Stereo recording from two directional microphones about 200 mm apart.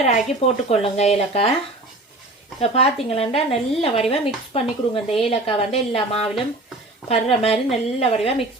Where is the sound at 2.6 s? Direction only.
30° left (ahead or behind).